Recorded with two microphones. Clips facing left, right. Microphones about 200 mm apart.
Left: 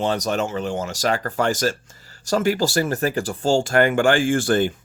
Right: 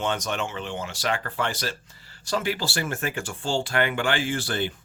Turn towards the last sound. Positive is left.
turn(degrees=50)  # may be behind; listen again after turning